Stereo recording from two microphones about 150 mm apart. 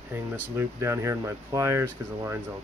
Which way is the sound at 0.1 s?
15° right (ahead or behind).